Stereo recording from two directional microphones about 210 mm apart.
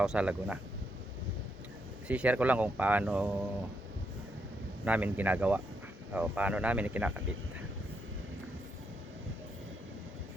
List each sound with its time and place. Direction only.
0.0 s speech: 5° right (ahead or behind)
2.0 s speech: 5° right (ahead or behind)
4.9 s speech: 10° right (ahead or behind)